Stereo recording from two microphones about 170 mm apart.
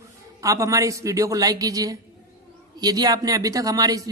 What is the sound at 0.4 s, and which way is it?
A man's voice, 20° right (ahead or behind).